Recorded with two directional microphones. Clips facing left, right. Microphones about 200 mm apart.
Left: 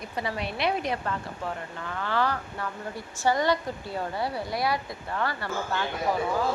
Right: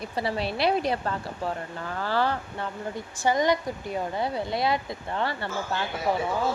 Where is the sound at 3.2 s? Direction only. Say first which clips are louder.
Right 1 dB; 15° right (ahead or behind).